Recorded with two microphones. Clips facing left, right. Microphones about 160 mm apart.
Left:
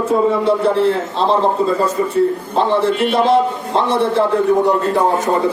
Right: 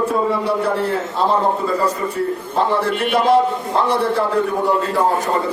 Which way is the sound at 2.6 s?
25° left (ahead or behind).